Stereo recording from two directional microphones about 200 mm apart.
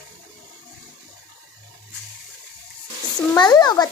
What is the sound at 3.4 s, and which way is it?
Speech, 20° left (ahead or behind).